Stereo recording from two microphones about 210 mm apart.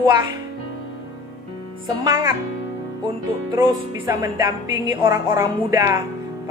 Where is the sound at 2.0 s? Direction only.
20° right (ahead or behind).